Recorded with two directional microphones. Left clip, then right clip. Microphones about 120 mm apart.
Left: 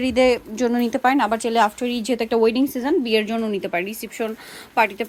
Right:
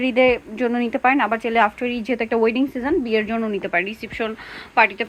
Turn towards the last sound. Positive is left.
turn(degrees=35)  # may be behind; listen again after turning